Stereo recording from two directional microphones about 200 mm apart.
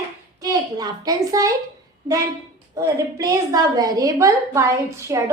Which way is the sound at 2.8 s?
15° right (ahead or behind).